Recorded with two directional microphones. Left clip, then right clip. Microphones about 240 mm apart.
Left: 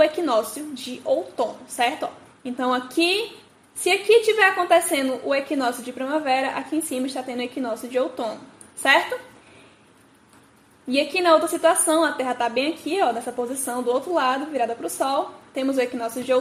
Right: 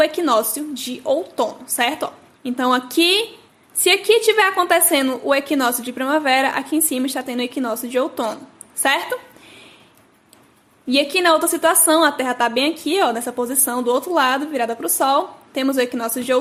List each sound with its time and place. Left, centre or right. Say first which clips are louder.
0.0 s a woman's voice: right 3 dB; centre
10.8 s a woman's voice: right 3 dB; centre